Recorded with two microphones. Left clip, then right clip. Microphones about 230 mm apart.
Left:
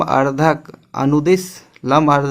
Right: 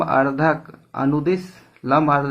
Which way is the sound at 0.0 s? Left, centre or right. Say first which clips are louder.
Left 3 dB; left.